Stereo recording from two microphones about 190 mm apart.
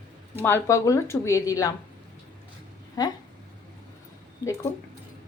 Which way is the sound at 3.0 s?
20° left (ahead or behind).